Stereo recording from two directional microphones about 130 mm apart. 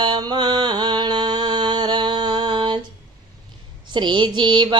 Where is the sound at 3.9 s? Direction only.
35° right (ahead or behind).